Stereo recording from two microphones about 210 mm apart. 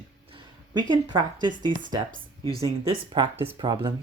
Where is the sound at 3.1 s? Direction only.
25° right (ahead or behind).